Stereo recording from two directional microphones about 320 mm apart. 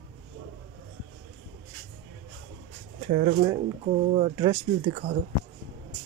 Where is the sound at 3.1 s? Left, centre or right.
Right.